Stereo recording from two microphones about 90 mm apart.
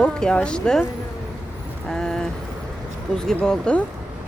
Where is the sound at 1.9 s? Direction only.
5° left (ahead or behind).